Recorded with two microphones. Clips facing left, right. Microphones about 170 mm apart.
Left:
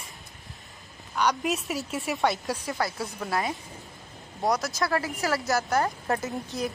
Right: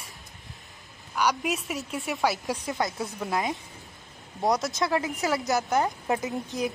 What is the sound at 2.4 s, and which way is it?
Speech, 20° right (ahead or behind).